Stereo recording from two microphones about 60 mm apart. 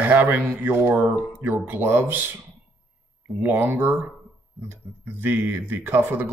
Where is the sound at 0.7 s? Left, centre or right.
Right.